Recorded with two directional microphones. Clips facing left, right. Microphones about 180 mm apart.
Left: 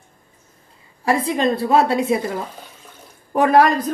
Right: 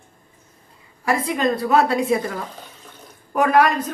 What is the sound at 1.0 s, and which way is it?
Speech, 25° left (ahead or behind).